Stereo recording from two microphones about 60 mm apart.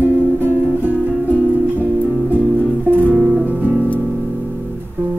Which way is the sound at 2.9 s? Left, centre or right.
Right.